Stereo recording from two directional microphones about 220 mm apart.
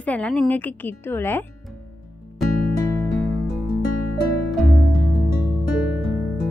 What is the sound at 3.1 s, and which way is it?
Music, 5° right (ahead or behind).